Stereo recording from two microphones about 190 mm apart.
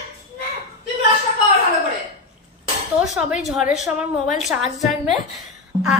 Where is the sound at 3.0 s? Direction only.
5° right (ahead or behind).